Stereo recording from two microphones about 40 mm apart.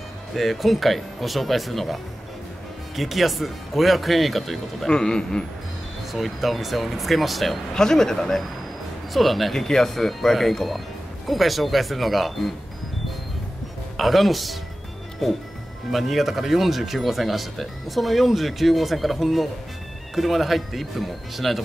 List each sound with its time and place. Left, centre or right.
0.3 s speech: centre
3.0 s speech: centre
4.9 s speech: centre
6.1 s speech: centre
7.7 s speech: centre
9.6 s speech: centre
13.9 s speech: centre